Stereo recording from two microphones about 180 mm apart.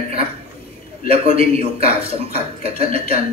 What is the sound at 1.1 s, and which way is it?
A man's voice, 30° right (ahead or behind).